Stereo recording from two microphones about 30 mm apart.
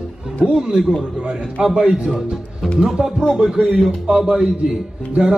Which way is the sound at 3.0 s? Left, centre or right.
Right.